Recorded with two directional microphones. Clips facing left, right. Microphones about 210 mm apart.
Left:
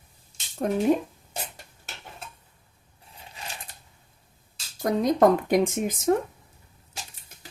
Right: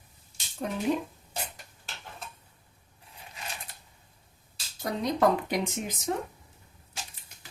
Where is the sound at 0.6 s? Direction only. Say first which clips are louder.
Left 7 dB; 50° left (ahead or behind).